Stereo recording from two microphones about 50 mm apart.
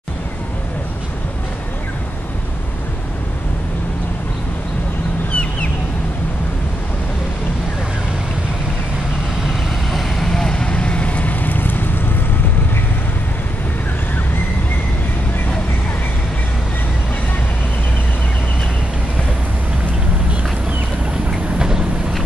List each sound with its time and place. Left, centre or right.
5.3 s a sound: left
9.8 s vehicle: centre; by 12.0 s left
21.3 s vehicle: centre